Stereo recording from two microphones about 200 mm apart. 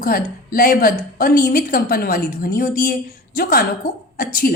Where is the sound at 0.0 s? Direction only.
45° left (ahead or behind).